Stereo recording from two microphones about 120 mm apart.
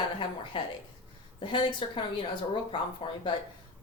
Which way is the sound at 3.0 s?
50° left (ahead or behind).